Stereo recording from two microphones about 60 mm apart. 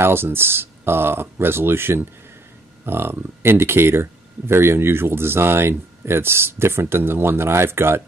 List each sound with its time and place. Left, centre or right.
0.0 s speech: right